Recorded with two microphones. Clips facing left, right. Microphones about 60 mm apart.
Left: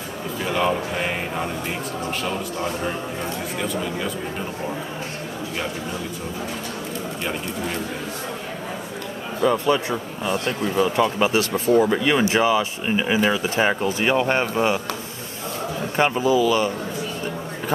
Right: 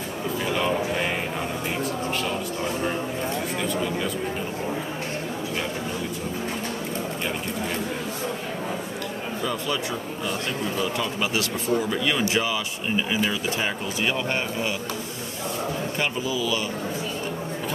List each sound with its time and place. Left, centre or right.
0.5 s a sound: centre
9.4 s speech: left
16.0 s speech: left